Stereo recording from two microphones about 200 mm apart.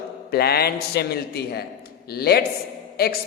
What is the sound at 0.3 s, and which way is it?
A man's voice, 50° left (ahead or behind).